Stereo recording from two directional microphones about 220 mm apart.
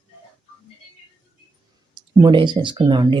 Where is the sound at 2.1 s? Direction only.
20° right (ahead or behind).